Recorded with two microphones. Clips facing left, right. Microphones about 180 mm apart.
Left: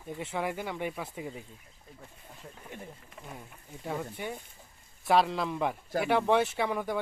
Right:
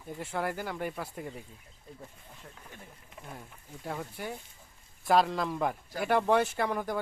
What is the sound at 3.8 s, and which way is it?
Speech, centre (ahead or behind).